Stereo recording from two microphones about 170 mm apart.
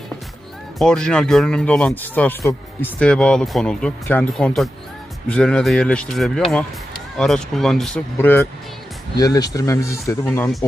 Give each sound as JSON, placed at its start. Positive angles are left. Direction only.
{"t": 0.8, "sound": "speech", "side_deg": 5}
{"t": 9.1, "sound": "speech", "side_deg": 20}